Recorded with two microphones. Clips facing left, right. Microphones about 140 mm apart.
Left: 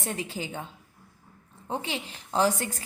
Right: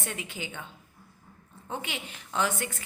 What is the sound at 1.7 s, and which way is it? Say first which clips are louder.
A woman's voice: left 4 dB; 35° left (ahead or behind).